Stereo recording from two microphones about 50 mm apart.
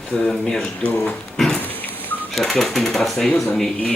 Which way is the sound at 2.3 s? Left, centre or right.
Centre.